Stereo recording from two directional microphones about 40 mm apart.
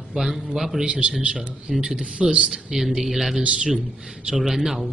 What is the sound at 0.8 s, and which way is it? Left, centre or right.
Speech, right.